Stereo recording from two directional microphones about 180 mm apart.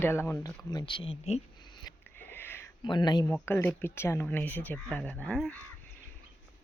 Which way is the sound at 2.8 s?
25° left (ahead or behind).